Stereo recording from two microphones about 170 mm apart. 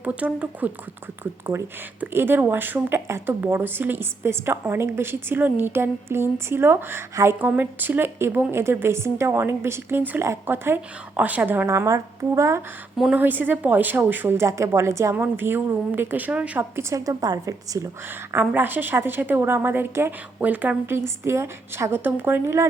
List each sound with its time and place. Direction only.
0.0 s speech: 10° right (ahead or behind)
13.0 s speech: 5° right (ahead or behind)